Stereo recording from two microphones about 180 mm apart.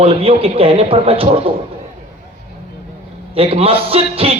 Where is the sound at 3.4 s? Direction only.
30° right (ahead or behind).